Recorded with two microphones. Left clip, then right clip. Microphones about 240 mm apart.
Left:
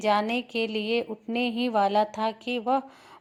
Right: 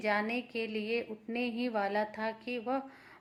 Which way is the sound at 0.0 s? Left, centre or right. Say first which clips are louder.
Left 8 dB; left.